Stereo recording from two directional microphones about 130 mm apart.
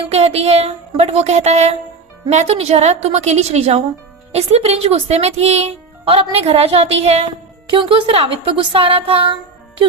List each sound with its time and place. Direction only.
0.0 s a woman's voice: 50° right (ahead or behind)
7.7 s speech: 40° right (ahead or behind)